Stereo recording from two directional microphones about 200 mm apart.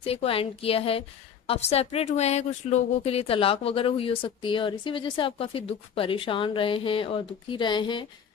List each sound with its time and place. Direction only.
0.0 s speech: 30° left (ahead or behind)